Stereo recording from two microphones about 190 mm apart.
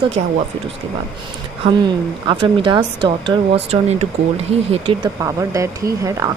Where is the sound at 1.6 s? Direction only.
25° right (ahead or behind).